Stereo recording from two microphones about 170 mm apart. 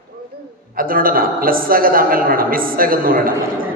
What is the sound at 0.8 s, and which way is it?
A man's voice, 55° right (ahead or behind).